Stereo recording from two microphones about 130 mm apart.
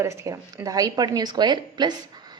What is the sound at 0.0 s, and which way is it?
Speech, 20° right (ahead or behind).